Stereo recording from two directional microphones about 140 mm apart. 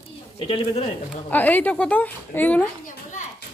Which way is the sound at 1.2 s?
10° left (ahead or behind).